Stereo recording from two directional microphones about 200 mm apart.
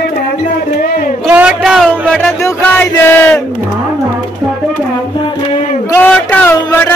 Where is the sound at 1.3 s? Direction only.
5° right (ahead or behind); by 3.4 s 10° left (ahead or behind).